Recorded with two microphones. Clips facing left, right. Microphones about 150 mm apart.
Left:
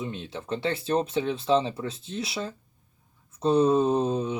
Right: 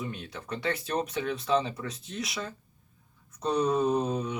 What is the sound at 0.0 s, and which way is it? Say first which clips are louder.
Speech: left 3 dB; 25° left (ahead or behind).